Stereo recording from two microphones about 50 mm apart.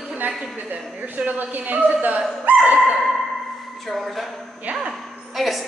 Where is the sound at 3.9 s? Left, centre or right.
Centre.